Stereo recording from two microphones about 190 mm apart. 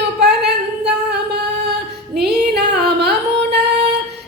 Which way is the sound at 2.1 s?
60° right (ahead or behind).